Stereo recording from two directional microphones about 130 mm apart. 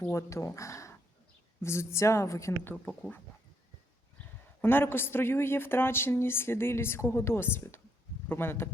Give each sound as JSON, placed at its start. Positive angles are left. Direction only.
{"t": 0.1, "sound": "speech", "side_deg": 20}
{"t": 4.6, "sound": "speech", "side_deg": 15}